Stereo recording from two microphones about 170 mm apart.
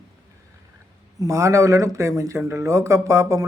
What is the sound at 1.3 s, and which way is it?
Speech, 15° right (ahead or behind).